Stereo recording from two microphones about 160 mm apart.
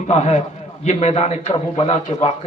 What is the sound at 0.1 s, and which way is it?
A man's voice, 45° left (ahead or behind).